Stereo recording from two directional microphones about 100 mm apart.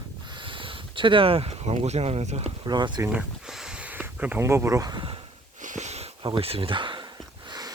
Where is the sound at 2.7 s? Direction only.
45° right (ahead or behind).